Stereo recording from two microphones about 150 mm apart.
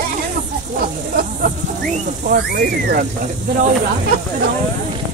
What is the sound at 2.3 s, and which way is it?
Speech, 75° right (ahead or behind).